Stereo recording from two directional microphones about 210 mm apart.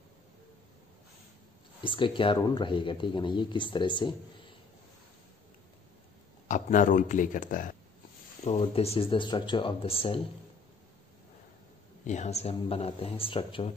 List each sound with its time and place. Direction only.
1.8 s speech: 25° left (ahead or behind)
6.4 s a man's voice: 35° left (ahead or behind)
8.5 s speech: 30° left (ahead or behind)
12.1 s speech: 35° left (ahead or behind)